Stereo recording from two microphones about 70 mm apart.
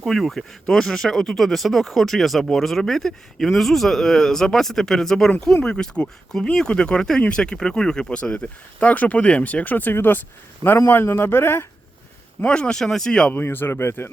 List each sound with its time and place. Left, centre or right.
0.0 s a man's voice: centre; by 11.6 s left
12.4 s speech: centre
13.3 s a man's voice: left